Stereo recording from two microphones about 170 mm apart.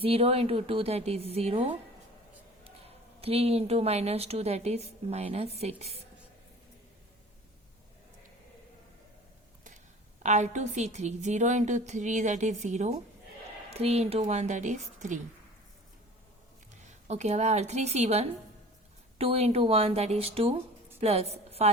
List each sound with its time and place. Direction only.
0.0 s a woman's voice: 35° right (ahead or behind)
3.2 s a woman's voice: 35° right (ahead or behind)
10.2 s a woman's voice: 45° right (ahead or behind)
16.8 s a woman's voice: 40° right (ahead or behind)